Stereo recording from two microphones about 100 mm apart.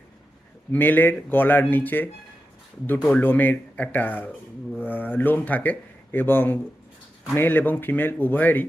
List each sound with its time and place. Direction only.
0.7 s speech: 20° left (ahead or behind)